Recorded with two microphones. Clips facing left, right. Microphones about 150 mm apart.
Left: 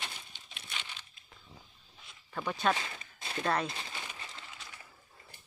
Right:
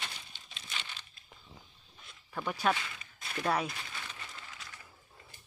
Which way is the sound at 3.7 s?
25° left (ahead or behind).